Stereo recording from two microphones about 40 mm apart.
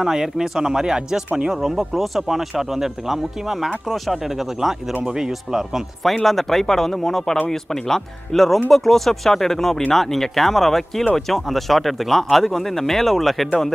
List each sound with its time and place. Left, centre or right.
0.0 s speech: centre
1.5 s speech: centre
6.2 s speech: centre